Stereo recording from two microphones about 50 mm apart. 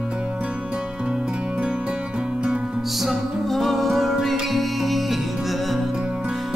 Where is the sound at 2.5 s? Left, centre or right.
Centre.